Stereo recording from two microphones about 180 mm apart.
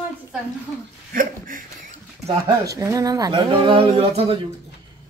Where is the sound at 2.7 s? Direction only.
20° right (ahead or behind).